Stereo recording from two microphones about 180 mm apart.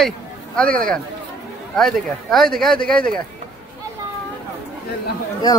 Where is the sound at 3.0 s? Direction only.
50° right (ahead or behind).